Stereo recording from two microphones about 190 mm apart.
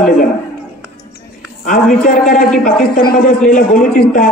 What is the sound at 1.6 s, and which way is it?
A man's voice, 50° left (ahead or behind).